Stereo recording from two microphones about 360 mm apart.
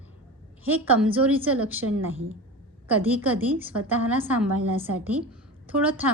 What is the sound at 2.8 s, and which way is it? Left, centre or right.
A woman's voice, centre.